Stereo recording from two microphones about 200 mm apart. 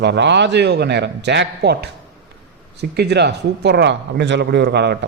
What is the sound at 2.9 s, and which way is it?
A man's voice, 55° right (ahead or behind).